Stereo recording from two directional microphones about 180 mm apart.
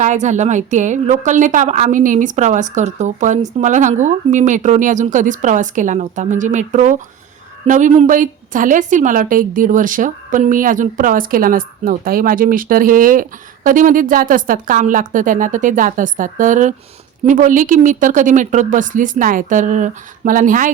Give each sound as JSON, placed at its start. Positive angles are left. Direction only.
{"t": 0.0, "sound": "a woman's voice", "side_deg": -40}